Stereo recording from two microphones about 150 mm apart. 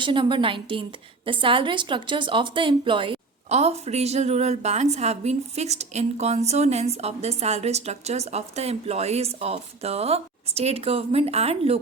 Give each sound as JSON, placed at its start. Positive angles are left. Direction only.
{"t": 0.0, "sound": "a woman's voice", "side_deg": -35}
{"t": 3.5, "sound": "a woman's voice", "side_deg": -45}